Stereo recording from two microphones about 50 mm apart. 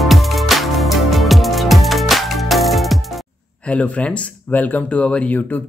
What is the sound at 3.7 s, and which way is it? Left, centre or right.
Speech, left.